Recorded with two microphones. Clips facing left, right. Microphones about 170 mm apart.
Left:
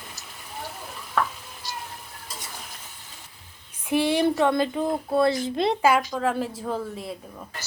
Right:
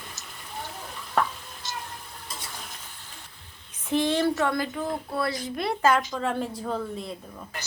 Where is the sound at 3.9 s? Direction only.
10° left (ahead or behind).